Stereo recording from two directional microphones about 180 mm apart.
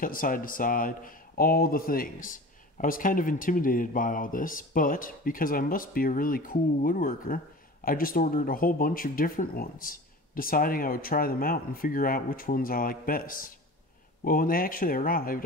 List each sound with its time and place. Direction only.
0.0 s speech: 50° left (ahead or behind)